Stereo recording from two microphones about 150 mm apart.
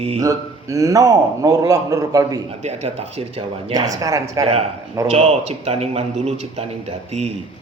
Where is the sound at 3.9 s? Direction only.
20° right (ahead or behind).